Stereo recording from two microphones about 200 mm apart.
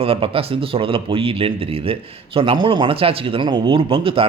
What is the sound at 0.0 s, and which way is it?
A man's voice, 30° right (ahead or behind).